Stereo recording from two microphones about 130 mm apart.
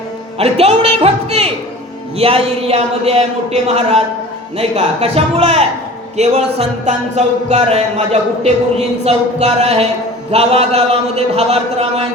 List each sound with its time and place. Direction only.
0.3 s speech: 50° right (ahead or behind)